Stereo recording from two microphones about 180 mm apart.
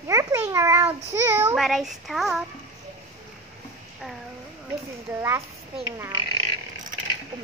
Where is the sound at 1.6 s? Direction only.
Centre (ahead or behind).